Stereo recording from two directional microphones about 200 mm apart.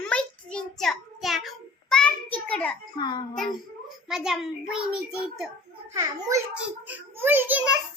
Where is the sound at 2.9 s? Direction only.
25° left (ahead or behind).